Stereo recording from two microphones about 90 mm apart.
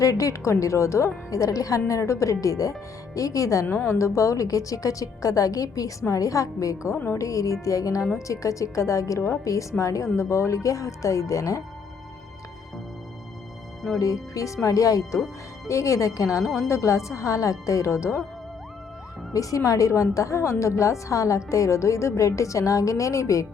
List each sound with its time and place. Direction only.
0.0 s a woman's voice: 40° left (ahead or behind)
14.0 s a woman's voice: 40° left (ahead or behind)
19.3 s a woman's voice: 40° left (ahead or behind)